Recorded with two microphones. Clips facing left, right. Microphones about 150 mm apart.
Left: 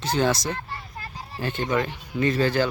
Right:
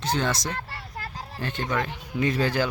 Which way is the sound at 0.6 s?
75° right (ahead or behind).